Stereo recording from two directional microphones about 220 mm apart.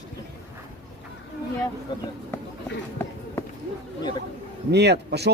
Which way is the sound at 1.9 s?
20° left (ahead or behind).